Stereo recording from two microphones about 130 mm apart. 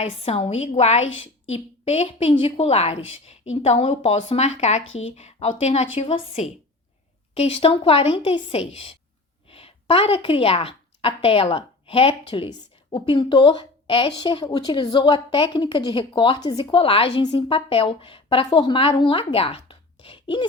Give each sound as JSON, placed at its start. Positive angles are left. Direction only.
{"t": 0.0, "sound": "a woman's voice", "side_deg": 50}